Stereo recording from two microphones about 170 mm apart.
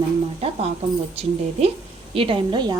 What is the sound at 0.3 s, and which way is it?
A woman's voice, 35° right (ahead or behind).